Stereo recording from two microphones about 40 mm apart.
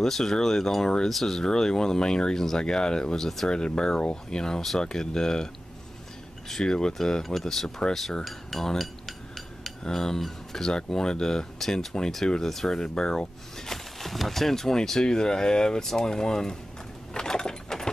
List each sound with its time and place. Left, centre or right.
0.0 s speech: centre
6.6 s speech: centre
9.6 s cutlery: centre
10.9 s speech: centre
13.9 s speech: centre
17.1 s a sound: centre